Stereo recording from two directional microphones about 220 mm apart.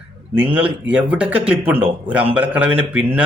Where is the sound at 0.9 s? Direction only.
5° right (ahead or behind).